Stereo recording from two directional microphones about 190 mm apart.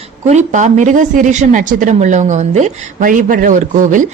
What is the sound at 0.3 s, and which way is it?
Speech, 40° right (ahead or behind).